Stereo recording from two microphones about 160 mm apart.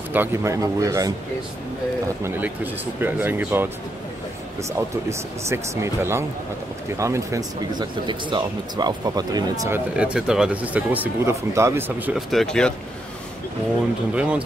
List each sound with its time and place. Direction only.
0.1 s speech: 15° right (ahead or behind)
2.2 s speech: 10° right (ahead or behind)
5.5 s speech: 15° right (ahead or behind)
9.9 s speech: 5° right (ahead or behind)
12.1 s speech: centre (ahead or behind)
14.1 s speech: 5° right (ahead or behind)